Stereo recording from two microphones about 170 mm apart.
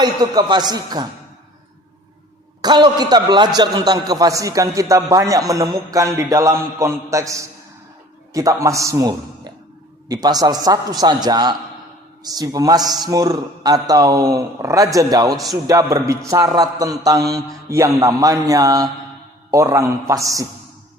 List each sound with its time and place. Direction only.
0.0 s a man's voice: 25° right (ahead or behind)
2.6 s a man's voice: 25° right (ahead or behind)